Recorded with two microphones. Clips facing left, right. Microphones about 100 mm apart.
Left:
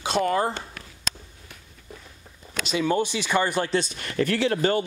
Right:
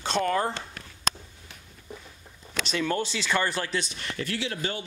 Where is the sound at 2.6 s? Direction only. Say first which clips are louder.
Left 5 dB; 10° left (ahead or behind).